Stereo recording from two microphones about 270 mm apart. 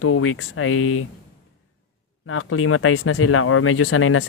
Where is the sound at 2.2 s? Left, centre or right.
Left.